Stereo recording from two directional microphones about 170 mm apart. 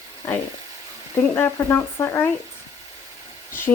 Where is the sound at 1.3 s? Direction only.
15° left (ahead or behind).